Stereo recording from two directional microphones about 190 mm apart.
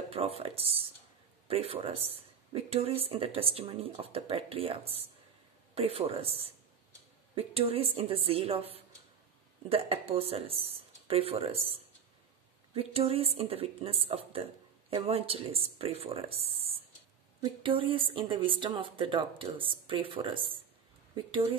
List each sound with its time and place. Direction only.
0.1 s speech: 30° right (ahead or behind)